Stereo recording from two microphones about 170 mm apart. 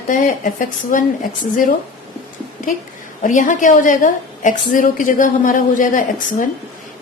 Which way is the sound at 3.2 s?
50° left (ahead or behind).